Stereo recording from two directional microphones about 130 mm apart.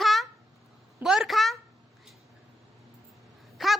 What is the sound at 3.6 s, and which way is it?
Speech, centre (ahead or behind).